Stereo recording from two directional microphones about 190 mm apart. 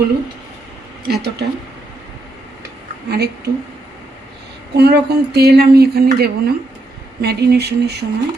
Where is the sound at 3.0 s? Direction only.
60° right (ahead or behind).